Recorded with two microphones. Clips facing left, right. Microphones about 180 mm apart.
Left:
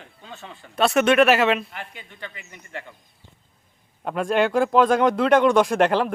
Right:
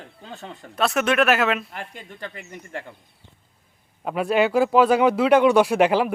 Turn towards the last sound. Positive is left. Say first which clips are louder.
# right 1 dB
turn(degrees=-10)  # may be behind; listen again after turning